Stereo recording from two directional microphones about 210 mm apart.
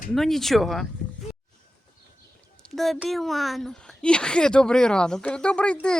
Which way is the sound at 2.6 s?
Centre (ahead or behind).